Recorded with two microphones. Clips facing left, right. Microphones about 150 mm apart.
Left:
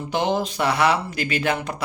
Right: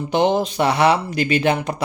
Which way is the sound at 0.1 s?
20° right (ahead or behind).